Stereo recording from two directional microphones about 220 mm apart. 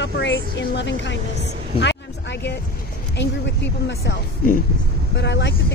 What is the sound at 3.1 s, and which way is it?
Speech, 50° left (ahead or behind).